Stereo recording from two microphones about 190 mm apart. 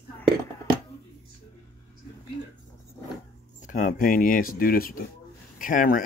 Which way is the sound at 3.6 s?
45° left (ahead or behind).